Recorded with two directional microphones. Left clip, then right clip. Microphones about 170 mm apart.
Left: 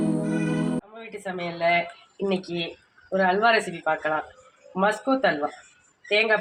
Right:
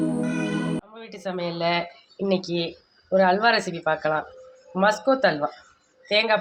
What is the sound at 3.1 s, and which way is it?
Speech, centre (ahead or behind).